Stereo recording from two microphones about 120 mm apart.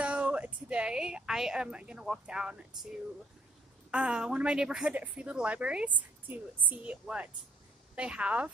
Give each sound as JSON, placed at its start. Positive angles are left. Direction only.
{"t": 0.0, "sound": "speech", "side_deg": -10}
{"t": 3.9, "sound": "a woman's voice", "side_deg": -10}